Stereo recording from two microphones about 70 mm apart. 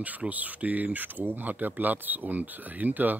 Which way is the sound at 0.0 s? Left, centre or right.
Right.